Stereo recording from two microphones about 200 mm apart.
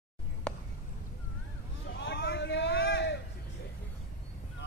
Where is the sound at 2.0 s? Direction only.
55° left (ahead or behind).